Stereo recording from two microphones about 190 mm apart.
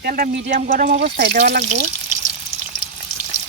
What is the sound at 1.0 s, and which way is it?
Speech, 60° right (ahead or behind).